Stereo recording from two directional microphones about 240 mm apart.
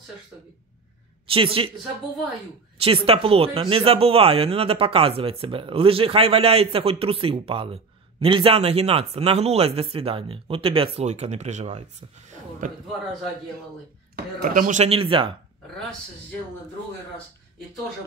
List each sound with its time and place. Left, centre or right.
1.3 s speech: right
2.8 s speech: right
12.3 s a sound: right
14.1 s speech: right